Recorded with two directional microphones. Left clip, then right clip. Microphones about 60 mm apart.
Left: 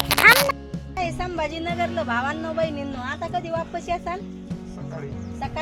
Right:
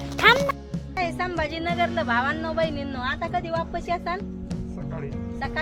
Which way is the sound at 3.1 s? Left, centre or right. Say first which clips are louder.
Left 2 dB; right.